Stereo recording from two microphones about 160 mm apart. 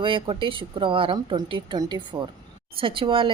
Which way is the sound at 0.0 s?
30° right (ahead or behind).